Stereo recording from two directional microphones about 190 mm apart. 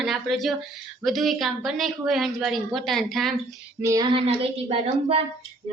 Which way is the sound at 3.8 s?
20° right (ahead or behind).